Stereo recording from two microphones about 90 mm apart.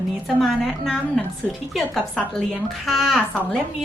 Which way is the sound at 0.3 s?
Centre (ahead or behind).